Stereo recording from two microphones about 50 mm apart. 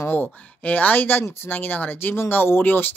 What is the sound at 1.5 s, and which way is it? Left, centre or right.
Speech, left.